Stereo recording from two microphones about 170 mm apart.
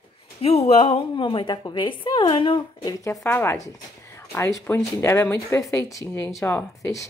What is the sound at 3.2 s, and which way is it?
Speech, 15° left (ahead or behind).